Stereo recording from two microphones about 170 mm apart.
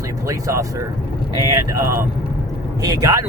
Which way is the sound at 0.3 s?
20° right (ahead or behind).